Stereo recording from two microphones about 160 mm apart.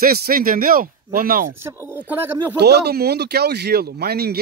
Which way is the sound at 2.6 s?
90° right.